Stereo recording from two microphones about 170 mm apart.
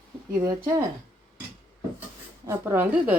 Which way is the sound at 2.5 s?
15° right (ahead or behind).